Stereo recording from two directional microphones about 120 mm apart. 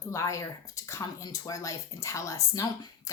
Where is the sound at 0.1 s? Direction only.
25° left (ahead or behind).